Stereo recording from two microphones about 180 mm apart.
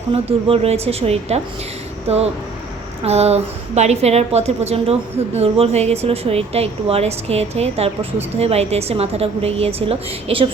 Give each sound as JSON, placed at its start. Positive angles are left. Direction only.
{"t": 0.1, "sound": "a woman's voice", "side_deg": -30}